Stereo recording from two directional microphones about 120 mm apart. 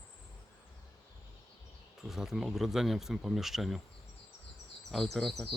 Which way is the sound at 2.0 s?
5° right (ahead or behind).